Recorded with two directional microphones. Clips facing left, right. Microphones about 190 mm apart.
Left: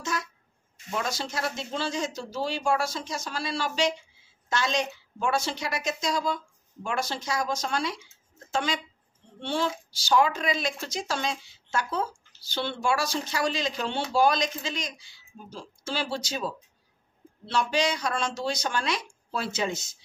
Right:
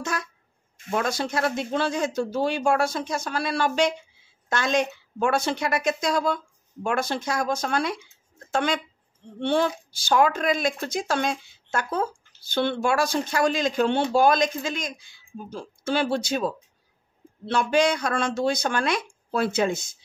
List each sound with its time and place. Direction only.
0.0 s a woman's voice: 55° right (ahead or behind)